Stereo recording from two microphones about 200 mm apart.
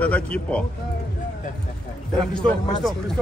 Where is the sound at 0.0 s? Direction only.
5° left (ahead or behind).